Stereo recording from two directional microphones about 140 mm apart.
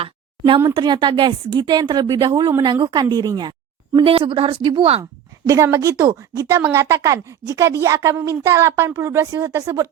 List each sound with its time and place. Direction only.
0.0 s a sound: 40° right (ahead or behind)
0.7 s a woman's voice: 35° right (ahead or behind)
5.5 s speech: 20° right (ahead or behind)